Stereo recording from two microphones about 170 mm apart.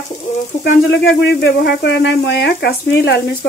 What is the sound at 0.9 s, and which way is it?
Speech, 75° left (ahead or behind).